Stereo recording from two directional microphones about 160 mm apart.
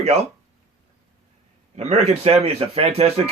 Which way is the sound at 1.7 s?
45° right (ahead or behind).